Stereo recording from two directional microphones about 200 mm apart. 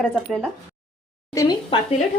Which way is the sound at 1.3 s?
25° left (ahead or behind).